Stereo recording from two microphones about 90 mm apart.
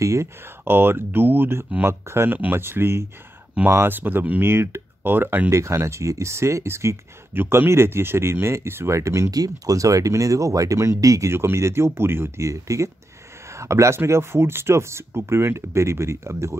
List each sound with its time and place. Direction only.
0.0 s speech: 35° right (ahead or behind)
5.5 s speech: 30° right (ahead or behind)